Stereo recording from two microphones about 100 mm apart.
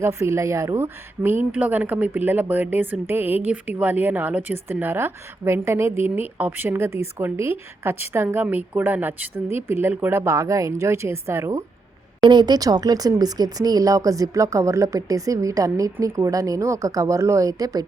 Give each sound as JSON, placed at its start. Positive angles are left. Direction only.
{"t": 0.0, "sound": "speech", "side_deg": -25}
{"t": 12.2, "sound": "speech", "side_deg": -50}